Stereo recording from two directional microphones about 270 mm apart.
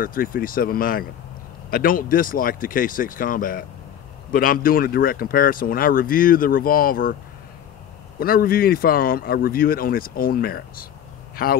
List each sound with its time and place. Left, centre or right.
0.0 s speech: left
8.2 s speech: left